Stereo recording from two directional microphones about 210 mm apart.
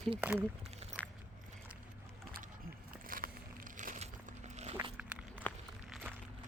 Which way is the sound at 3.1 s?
40° right (ahead or behind).